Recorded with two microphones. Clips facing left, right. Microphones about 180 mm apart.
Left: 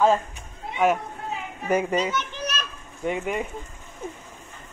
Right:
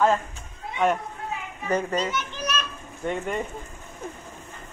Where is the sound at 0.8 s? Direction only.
5° left (ahead or behind).